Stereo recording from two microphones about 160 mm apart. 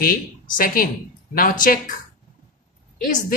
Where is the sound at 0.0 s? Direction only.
60° left (ahead or behind).